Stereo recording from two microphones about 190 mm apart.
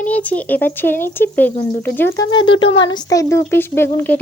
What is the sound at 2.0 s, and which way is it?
Speech, 20° left (ahead or behind).